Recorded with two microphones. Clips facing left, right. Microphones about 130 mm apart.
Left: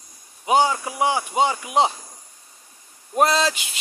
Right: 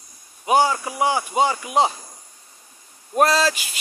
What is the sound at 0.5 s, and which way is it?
A man's voice, 20° left (ahead or behind).